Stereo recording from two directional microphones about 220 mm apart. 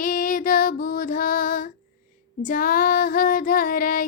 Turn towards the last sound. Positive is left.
turn(degrees=40)  # may be behind; listen again after turning